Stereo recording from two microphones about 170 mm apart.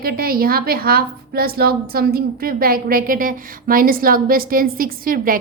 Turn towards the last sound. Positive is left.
turn(degrees=-55)  # may be behind; listen again after turning